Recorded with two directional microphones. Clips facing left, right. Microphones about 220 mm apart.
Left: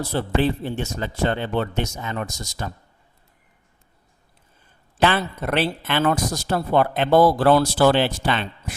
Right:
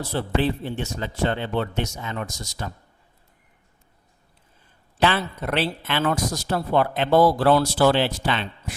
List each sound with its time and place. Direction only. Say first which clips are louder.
0.1 s speech: left 2 dB; 45° left (ahead or behind)
4.9 s speech: left 2 dB; 50° left (ahead or behind)